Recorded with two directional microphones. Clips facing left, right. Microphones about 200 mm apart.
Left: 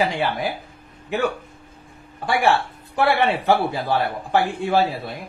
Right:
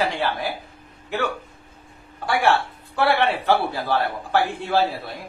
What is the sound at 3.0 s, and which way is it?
A man's voice, 20° left (ahead or behind).